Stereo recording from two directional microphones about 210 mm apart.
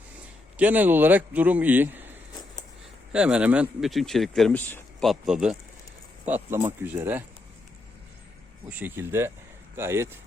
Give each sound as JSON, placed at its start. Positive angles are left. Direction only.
{"t": 0.5, "sound": "a man's voice", "side_deg": -10}
{"t": 8.7, "sound": "a man's voice", "side_deg": -10}